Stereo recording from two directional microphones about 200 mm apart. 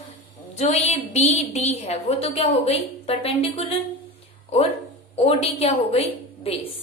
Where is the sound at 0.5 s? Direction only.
35° left (ahead or behind).